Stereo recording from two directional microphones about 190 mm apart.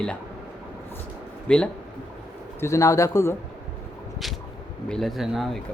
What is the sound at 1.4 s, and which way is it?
Speech, 5° left (ahead or behind).